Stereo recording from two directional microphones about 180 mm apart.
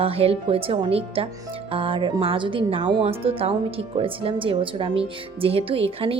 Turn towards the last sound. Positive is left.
turn(degrees=-30)  # may be behind; listen again after turning